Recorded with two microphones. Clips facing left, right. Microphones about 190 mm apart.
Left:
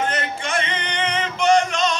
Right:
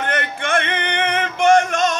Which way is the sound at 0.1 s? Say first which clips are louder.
Right 4 dB; 55° right (ahead or behind).